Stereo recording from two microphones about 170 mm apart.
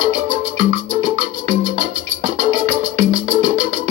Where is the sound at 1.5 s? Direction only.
45° right (ahead or behind).